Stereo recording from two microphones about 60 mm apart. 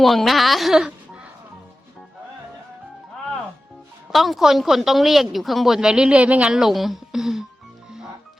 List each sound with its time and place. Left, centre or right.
0.0 s speech: centre
4.1 s a woman's voice: centre; by 6.5 s right
6.5 s a woman's voice: centre